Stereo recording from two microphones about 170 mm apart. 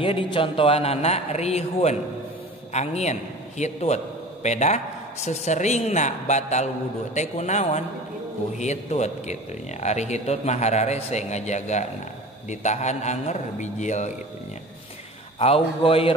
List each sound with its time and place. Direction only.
0.0 s a man's voice: 30° left (ahead or behind)
15.3 s a man's voice: 35° left (ahead or behind)